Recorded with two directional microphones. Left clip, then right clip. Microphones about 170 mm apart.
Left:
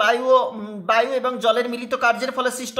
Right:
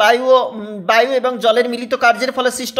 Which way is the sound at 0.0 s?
25° right (ahead or behind).